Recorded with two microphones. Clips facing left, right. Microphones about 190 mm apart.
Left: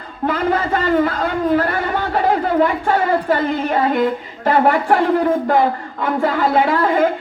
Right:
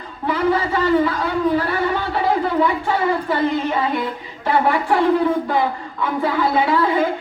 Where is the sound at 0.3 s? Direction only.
50° left (ahead or behind).